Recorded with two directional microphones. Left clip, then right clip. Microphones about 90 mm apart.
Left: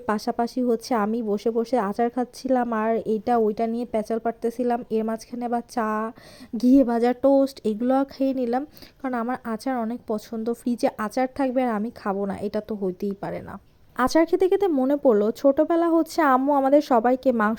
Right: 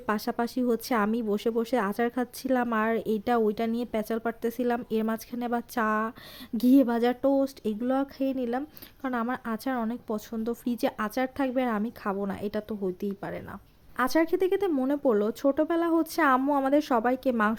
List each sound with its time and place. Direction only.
0.0 s a woman's voice: 30° left (ahead or behind)
7.2 s speech: 50° left (ahead or behind)
9.0 s a woman's voice: 30° left (ahead or behind)
13.9 s speech: 65° left (ahead or behind)
14.8 s speech: 45° left (ahead or behind)